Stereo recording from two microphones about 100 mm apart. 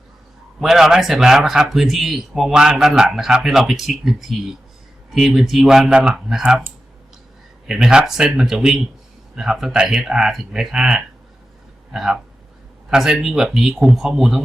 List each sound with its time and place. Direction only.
0.6 s speech: 5° right (ahead or behind)
7.7 s speech: 5° right (ahead or behind)